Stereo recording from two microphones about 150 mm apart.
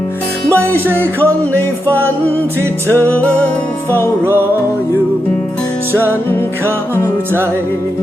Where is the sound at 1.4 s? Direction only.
10° left (ahead or behind).